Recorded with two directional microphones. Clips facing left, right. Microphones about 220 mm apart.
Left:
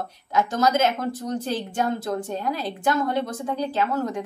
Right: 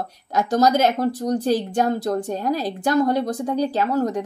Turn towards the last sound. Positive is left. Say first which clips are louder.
# right 4 dB
turn(degrees=-40)  # may be behind; listen again after turning